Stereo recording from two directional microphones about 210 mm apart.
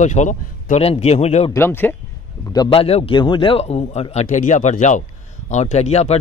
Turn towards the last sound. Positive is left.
turn(degrees=30)  # may be behind; listen again after turning